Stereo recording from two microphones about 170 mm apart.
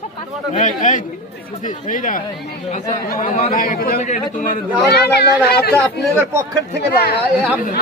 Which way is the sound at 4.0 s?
45° left (ahead or behind).